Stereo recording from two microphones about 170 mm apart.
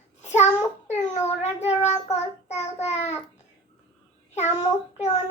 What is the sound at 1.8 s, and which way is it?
Child singing, 40° left (ahead or behind).